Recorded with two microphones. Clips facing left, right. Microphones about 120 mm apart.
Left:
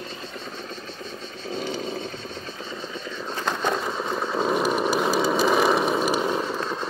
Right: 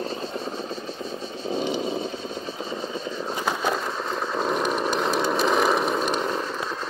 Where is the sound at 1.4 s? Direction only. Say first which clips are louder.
Right 4 dB; 20° right (ahead or behind).